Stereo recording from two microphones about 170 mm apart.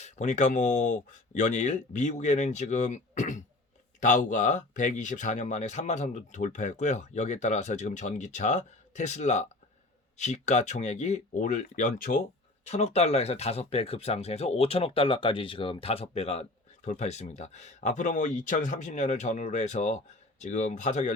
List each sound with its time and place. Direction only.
0.0 s speech: 45° left (ahead or behind)
12.6 s speech: 40° left (ahead or behind)